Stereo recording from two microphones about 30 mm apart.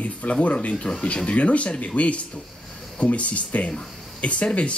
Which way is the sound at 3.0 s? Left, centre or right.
Left.